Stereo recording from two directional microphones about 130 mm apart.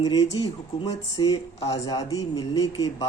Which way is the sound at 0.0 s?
30° left (ahead or behind).